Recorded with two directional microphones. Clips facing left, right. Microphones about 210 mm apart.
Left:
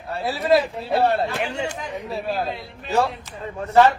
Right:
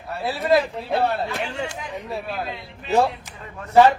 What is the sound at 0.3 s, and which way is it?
Speech, centre (ahead or behind).